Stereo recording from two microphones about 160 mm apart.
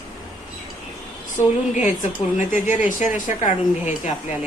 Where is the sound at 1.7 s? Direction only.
50° left (ahead or behind).